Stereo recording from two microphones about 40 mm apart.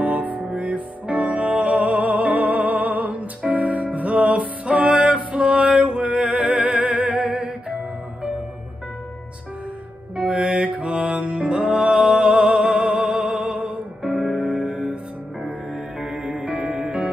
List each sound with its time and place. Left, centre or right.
0.0 s music: right
10.4 s mantra: right
10.9 s music: right
14.0 s music: centre; by 16.7 s right
16.8 s music: right